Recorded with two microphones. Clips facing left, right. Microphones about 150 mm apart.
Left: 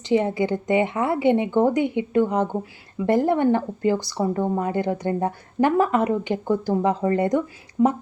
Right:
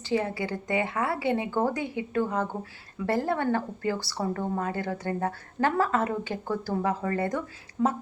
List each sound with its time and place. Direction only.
0.0 s speech: 20° left (ahead or behind)